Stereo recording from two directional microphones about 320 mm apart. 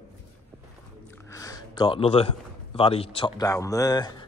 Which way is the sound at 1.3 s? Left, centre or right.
Centre.